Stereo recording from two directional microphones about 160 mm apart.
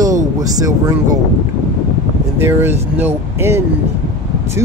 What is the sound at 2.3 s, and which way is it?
Speech, 15° right (ahead or behind).